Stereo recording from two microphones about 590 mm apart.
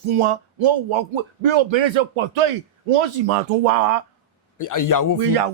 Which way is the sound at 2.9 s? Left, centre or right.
Right.